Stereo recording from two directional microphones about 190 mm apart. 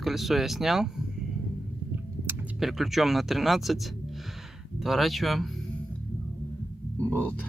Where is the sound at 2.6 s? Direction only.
Centre (ahead or behind).